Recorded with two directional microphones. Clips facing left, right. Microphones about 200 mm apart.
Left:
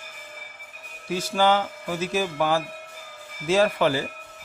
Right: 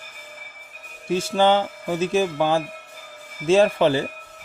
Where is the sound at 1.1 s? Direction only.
25° right (ahead or behind).